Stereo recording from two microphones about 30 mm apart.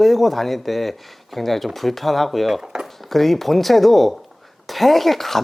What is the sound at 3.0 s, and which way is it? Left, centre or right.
Speech, centre.